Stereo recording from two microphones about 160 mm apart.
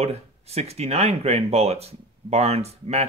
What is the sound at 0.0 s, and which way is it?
Speech, 40° right (ahead or behind).